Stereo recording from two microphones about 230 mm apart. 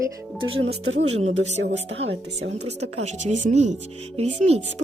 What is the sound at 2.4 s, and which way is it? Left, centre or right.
Speech, right.